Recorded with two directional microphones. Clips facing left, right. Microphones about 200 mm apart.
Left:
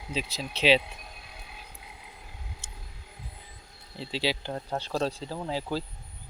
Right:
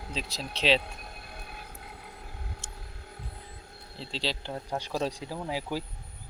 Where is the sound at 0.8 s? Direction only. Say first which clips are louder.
Even; 55° right (ahead or behind).